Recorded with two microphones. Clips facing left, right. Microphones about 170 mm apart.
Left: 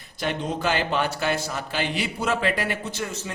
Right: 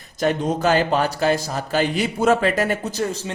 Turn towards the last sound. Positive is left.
turn(degrees=-35)  # may be behind; listen again after turning